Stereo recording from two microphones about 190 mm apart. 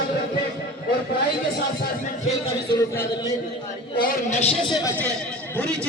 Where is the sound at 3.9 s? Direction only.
45° left (ahead or behind).